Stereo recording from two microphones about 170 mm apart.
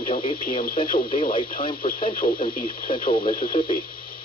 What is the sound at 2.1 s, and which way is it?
Speech, 55° left (ahead or behind).